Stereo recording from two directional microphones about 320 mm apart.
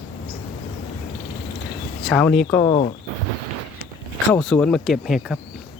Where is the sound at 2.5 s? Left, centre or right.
Centre.